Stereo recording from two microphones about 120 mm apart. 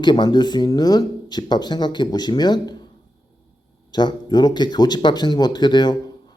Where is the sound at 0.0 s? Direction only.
35° left (ahead or behind).